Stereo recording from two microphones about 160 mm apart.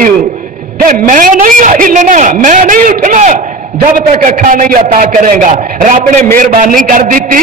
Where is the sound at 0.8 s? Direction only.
55° right (ahead or behind).